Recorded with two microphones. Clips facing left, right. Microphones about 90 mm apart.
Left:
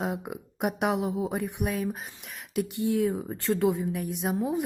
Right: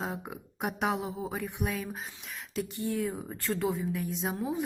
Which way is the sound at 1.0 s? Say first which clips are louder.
Left 7 dB; 65° left (ahead or behind).